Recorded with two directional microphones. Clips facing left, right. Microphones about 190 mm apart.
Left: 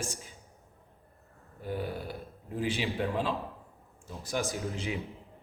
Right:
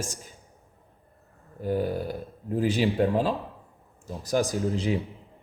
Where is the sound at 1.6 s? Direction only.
40° right (ahead or behind).